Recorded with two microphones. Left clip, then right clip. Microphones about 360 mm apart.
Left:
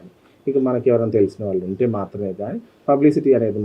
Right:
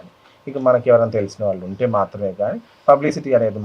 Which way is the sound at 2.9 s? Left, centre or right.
Right.